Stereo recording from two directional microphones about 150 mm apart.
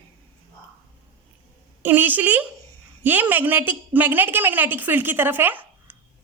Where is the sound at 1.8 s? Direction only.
15° right (ahead or behind).